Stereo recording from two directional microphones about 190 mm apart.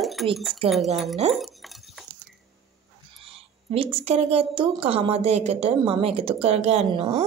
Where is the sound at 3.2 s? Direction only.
30° right (ahead or behind).